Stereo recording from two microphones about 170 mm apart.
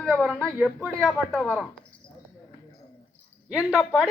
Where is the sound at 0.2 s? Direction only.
5° right (ahead or behind).